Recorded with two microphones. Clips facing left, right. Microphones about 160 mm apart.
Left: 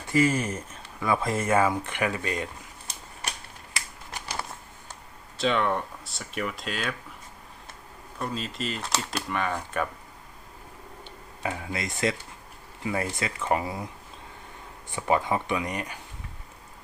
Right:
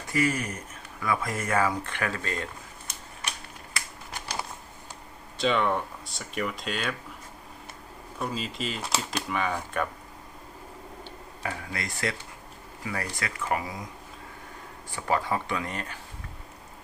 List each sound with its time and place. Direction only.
0.1 s speech: 25° left (ahead or behind)
5.4 s speech: centre (ahead or behind)
8.2 s speech: centre (ahead or behind)
11.4 s speech: 20° left (ahead or behind)
14.9 s speech: 20° left (ahead or behind)